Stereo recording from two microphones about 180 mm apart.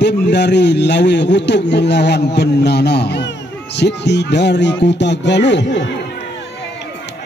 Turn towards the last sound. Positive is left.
turn(degrees=75)  # may be behind; listen again after turning